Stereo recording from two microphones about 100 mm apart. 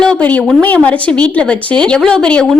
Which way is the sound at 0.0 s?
10° left (ahead or behind).